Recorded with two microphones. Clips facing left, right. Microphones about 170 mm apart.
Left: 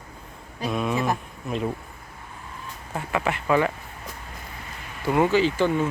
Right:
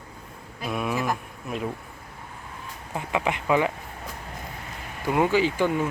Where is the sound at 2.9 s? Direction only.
15° right (ahead or behind).